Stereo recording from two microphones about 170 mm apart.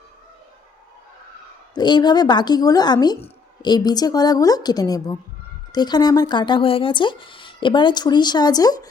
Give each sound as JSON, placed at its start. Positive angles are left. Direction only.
{"t": 1.7, "sound": "speech", "side_deg": 25}